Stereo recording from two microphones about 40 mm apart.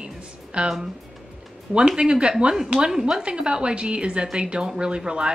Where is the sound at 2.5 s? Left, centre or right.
Centre.